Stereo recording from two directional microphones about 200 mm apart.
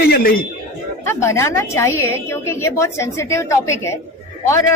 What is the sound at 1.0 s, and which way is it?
A woman's voice, 15° left (ahead or behind).